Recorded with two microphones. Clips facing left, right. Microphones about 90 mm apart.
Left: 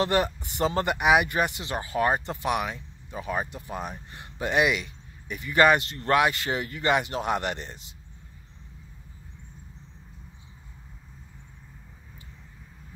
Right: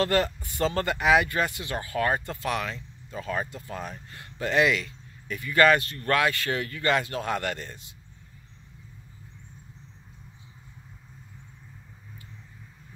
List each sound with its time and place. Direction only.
0.0 s speech: 20° left (ahead or behind)